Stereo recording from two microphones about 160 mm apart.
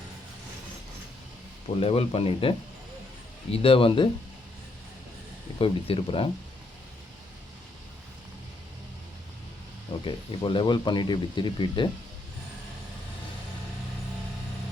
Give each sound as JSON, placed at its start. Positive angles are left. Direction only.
{"t": 1.8, "sound": "speech", "side_deg": 40}
{"t": 5.5, "sound": "speech", "side_deg": 35}
{"t": 10.0, "sound": "speech", "side_deg": 35}